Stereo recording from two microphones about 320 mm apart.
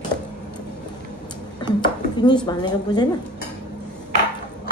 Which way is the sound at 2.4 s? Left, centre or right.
Centre.